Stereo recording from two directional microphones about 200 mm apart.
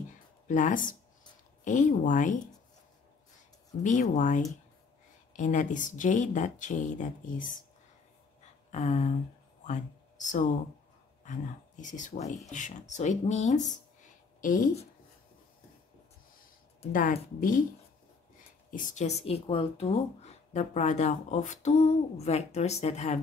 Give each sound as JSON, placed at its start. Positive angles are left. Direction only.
{"t": 0.5, "sound": "speech", "side_deg": 40}
{"t": 3.8, "sound": "speech", "side_deg": 35}
{"t": 8.7, "sound": "speech", "side_deg": 35}
{"t": 16.9, "sound": "speech", "side_deg": 40}
{"t": 18.7, "sound": "speech", "side_deg": 40}